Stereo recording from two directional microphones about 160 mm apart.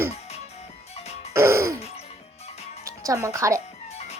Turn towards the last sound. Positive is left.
turn(degrees=-20)  # may be behind; listen again after turning